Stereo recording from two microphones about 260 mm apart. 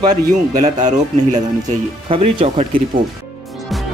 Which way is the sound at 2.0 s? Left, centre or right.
Right.